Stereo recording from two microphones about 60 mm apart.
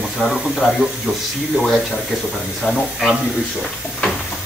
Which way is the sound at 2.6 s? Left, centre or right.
Left.